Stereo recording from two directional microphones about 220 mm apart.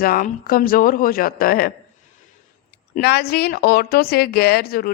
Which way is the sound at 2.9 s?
45° left (ahead or behind).